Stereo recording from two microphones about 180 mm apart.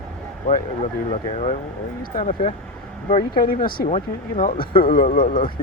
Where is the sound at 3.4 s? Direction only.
55° left (ahead or behind).